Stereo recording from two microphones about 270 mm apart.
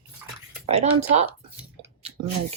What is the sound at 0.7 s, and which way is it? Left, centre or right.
Speech, right.